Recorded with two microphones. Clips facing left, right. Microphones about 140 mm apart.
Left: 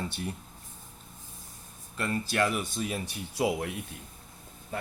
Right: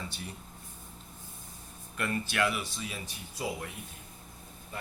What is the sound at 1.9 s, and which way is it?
Speech, 30° left (ahead or behind).